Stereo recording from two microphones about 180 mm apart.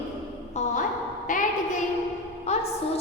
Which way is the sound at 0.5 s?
45° left (ahead or behind).